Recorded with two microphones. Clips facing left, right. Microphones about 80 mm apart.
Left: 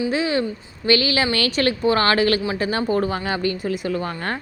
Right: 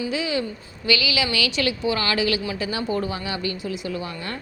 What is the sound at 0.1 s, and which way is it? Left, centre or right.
A woman's voice, left.